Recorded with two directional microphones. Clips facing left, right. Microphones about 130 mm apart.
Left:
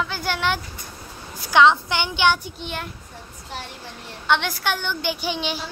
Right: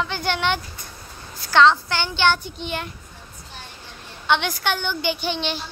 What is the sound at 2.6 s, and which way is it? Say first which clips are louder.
Speech: right 2 dB; centre (ahead or behind).